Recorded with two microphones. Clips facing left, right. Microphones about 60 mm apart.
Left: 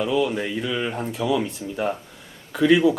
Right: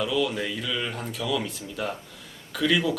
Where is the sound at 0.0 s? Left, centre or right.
Left.